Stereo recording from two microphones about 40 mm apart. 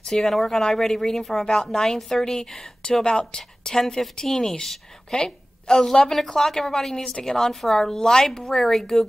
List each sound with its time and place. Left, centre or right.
0.0 s speech: centre